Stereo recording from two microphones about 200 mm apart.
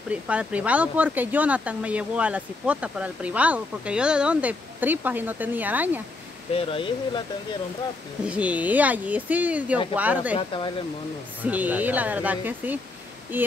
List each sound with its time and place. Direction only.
0.1 s speech: 5° right (ahead or behind)
6.5 s speech: 25° left (ahead or behind)
8.3 s speech: 5° right (ahead or behind)
10.3 s speech: 25° left (ahead or behind)
11.4 s speech: 10° right (ahead or behind)